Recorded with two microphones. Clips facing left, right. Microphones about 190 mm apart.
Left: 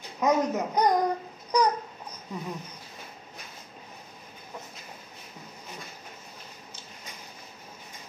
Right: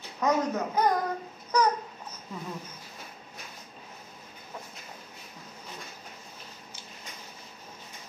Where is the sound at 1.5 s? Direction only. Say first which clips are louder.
Left 1 dB; 15° left (ahead or behind).